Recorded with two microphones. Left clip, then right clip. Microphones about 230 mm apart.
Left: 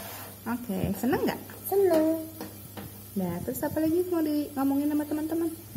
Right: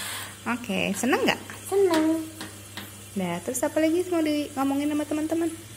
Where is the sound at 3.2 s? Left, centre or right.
Centre.